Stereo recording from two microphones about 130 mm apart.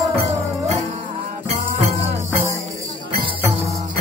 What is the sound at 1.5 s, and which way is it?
Music, 70° right (ahead or behind).